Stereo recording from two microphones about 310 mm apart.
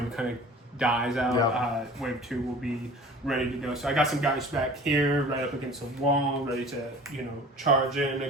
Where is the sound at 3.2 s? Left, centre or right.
Centre.